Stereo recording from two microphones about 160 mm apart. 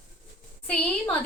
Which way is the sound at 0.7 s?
15° left (ahead or behind).